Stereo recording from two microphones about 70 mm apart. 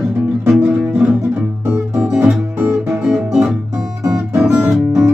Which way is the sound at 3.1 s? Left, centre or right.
Centre.